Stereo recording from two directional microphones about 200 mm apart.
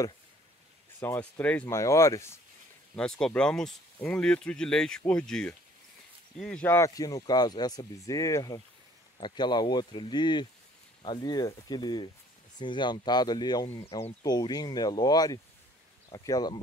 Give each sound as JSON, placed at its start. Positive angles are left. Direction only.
{"t": 1.0, "sound": "speech", "side_deg": 10}
{"t": 3.0, "sound": "speech", "side_deg": 5}